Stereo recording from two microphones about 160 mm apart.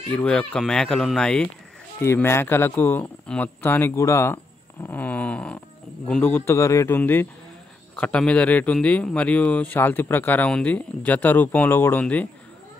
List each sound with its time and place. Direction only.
0.1 s speech: 5° left (ahead or behind)
2.0 s a man's voice: 15° left (ahead or behind)
4.8 s a sound: 10° left (ahead or behind)
6.0 s a man's voice: 10° left (ahead or behind)